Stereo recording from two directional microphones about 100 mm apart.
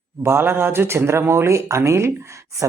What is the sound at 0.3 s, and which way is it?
Speech, 25° right (ahead or behind).